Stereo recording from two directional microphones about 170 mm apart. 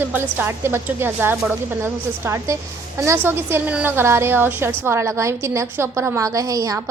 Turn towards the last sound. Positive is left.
turn(degrees=-20)  # may be behind; listen again after turning